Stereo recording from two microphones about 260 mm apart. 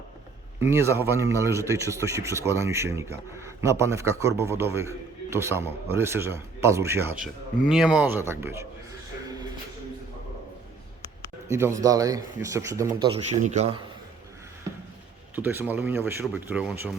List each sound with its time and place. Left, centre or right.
0.6 s speech: centre
11.4 s speech: centre
13.4 s a man's voice: right
15.4 s speech: centre